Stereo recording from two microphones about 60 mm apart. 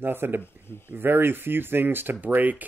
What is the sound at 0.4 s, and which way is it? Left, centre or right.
Speech, left.